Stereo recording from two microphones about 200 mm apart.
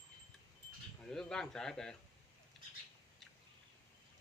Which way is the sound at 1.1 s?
5° left (ahead or behind).